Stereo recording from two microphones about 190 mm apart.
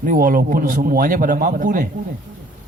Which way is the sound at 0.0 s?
45° right (ahead or behind).